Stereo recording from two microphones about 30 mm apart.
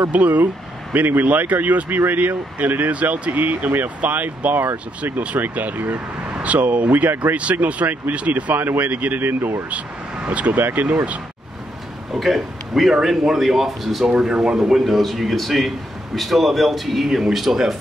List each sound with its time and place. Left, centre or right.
0.1 s speech: right
0.9 s speech: right
2.9 s speech: right
5.3 s speech: right
6.3 s speech: right
7.5 s speech: right
8.5 s speech: right
10.2 s speech: right
10.5 s speech: right
12.1 s a man's voice: centre
14.2 s speech: centre
14.9 s a man's voice: centre